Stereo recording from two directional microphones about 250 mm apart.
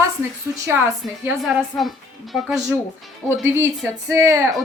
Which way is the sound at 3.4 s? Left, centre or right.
Centre.